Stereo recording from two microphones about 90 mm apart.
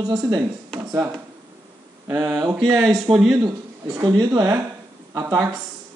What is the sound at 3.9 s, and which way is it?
Speech, 50° right (ahead or behind).